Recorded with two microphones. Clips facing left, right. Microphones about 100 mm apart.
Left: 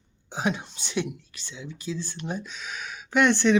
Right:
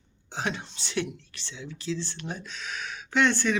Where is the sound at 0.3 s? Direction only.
15° left (ahead or behind).